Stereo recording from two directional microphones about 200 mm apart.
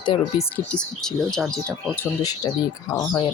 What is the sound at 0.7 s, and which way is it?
Speech, 5° left (ahead or behind).